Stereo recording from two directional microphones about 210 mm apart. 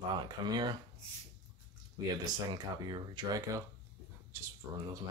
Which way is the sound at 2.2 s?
20° right (ahead or behind).